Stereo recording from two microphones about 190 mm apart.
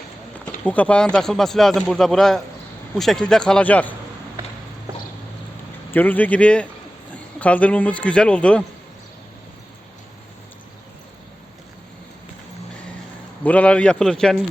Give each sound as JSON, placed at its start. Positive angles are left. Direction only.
{"t": 0.6, "sound": "speech", "side_deg": 5}
{"t": 5.9, "sound": "speech", "side_deg": 10}
{"t": 13.4, "sound": "speech", "side_deg": 5}